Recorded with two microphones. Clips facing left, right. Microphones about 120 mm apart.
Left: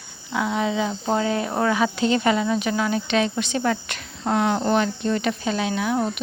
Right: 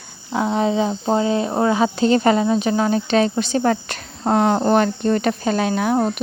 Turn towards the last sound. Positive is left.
turn(degrees=-40)  # may be behind; listen again after turning